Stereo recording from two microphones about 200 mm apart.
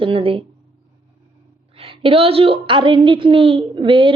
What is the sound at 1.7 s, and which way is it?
A woman's voice, 25° right (ahead or behind).